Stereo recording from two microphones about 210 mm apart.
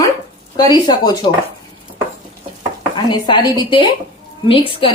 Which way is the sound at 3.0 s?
20° left (ahead or behind).